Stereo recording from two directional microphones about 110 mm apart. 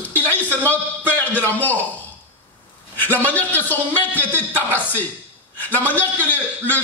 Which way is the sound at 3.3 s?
15° left (ahead or behind).